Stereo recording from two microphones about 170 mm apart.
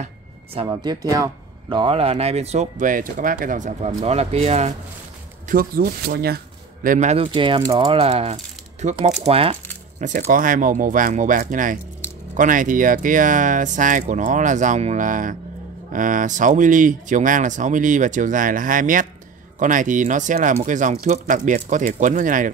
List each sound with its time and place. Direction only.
0.7 s speech: 20° right (ahead or behind); by 4.7 s 40° right (ahead or behind)
5.5 s speech: 55° right (ahead or behind); by 9.6 s 35° right (ahead or behind)
9.9 s speech: 45° right (ahead or behind)